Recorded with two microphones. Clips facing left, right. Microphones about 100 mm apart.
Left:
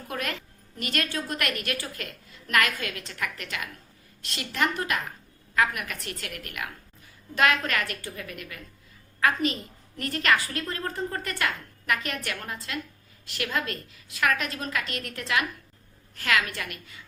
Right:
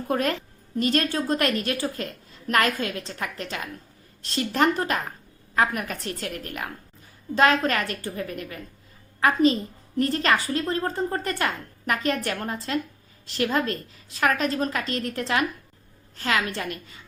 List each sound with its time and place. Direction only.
0.1 s a woman's voice: 35° right (ahead or behind)